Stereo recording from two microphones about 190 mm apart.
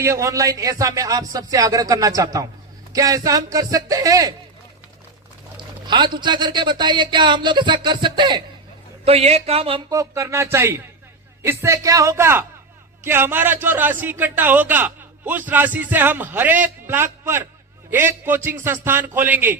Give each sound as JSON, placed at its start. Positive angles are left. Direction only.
{"t": 0.0, "sound": "a man's voice", "side_deg": -15}
{"t": 5.5, "sound": "a sound", "side_deg": -25}
{"t": 6.1, "sound": "speech", "side_deg": -25}
{"t": 9.9, "sound": "a man's voice", "side_deg": -15}